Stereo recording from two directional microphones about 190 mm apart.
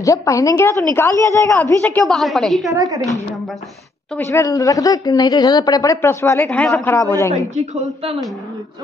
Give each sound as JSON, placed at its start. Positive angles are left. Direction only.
{"t": 0.0, "sound": "a woman's voice", "side_deg": 15}
{"t": 2.7, "sound": "a woman's voice", "side_deg": -20}
{"t": 4.2, "sound": "a woman's voice", "side_deg": 15}
{"t": 7.5, "sound": "a woman's voice", "side_deg": -40}